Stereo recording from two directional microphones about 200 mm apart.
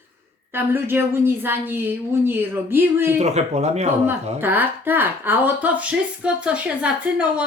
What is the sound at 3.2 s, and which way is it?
Speech, 35° right (ahead or behind).